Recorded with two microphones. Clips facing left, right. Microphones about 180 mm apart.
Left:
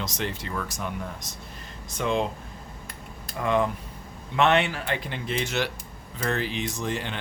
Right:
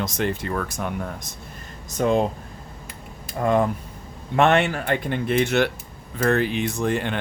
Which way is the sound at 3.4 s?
40° right (ahead or behind).